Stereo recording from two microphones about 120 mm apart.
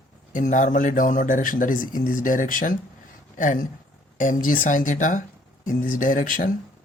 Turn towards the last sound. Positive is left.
turn(degrees=90)